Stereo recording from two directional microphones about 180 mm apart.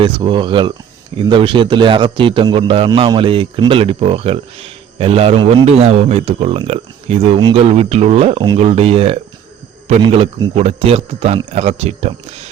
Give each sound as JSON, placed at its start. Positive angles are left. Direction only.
{"t": 0.0, "sound": "a man's voice", "side_deg": -25}